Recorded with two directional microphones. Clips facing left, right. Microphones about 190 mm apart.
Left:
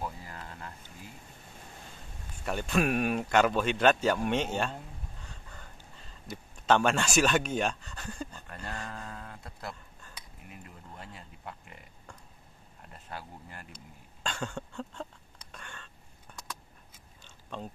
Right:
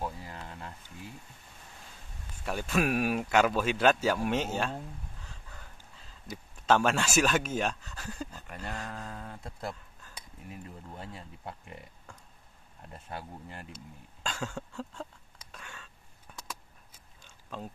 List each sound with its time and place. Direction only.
0.0 s a sound: 20° right (ahead or behind)
2.4 s speech: 5° right (ahead or behind)
9.2 s speech: 25° right (ahead or behind)
11.0 s speech: 30° right (ahead or behind)
12.9 s speech: 25° right (ahead or behind)
14.2 s a sound: centre (ahead or behind)
17.5 s speech: 5° right (ahead or behind)